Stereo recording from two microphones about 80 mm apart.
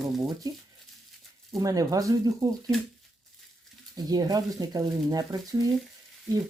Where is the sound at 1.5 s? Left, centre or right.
Right.